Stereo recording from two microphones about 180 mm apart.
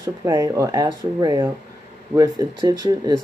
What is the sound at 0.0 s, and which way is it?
Speech, 15° right (ahead or behind).